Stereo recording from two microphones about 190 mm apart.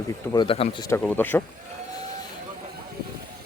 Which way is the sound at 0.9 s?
10° left (ahead or behind).